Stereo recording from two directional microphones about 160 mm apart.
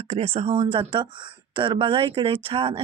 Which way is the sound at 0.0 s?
40° right (ahead or behind).